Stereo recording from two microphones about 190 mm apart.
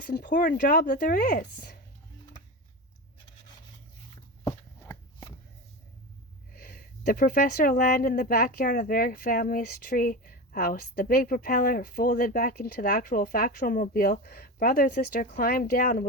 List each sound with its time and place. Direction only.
0.0 s speech: 50° left (ahead or behind)
4.4 s shuffling cards: 15° left (ahead or behind)
6.5 s speech: 50° left (ahead or behind)